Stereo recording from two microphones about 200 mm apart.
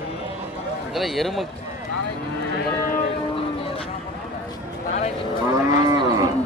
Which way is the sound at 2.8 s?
45° left (ahead or behind).